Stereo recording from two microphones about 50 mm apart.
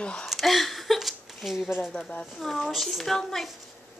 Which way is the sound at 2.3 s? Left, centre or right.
Centre.